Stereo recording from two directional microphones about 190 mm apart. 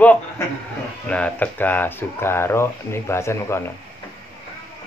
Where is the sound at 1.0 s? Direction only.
5° left (ahead or behind).